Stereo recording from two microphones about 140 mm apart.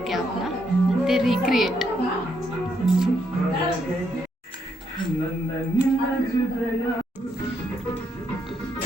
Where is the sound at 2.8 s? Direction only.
5° right (ahead or behind).